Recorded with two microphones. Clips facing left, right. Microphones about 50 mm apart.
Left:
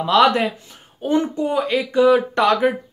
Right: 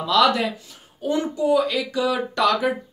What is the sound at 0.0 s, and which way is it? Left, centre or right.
Speech, left.